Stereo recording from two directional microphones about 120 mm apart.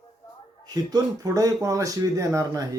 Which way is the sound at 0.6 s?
35° right (ahead or behind).